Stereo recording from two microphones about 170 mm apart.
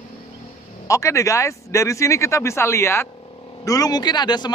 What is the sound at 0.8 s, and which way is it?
Speech, 20° left (ahead or behind).